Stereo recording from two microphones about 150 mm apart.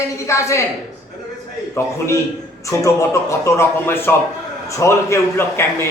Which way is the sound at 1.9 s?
20° left (ahead or behind).